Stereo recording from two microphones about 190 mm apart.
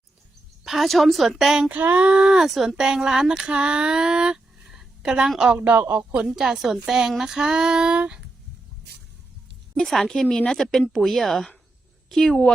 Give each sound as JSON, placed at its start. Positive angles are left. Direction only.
{"t": 0.6, "sound": "speech", "side_deg": 0}
{"t": 9.7, "sound": "speech", "side_deg": 0}